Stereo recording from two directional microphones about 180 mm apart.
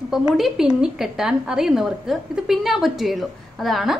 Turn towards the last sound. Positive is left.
turn(degrees=0)  # may be behind; listen again after turning